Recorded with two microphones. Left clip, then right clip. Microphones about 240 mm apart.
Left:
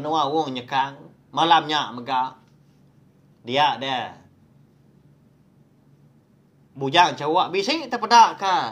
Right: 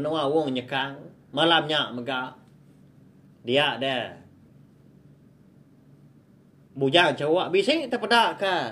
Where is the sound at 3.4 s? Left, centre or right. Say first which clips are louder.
Left 3 dB; centre.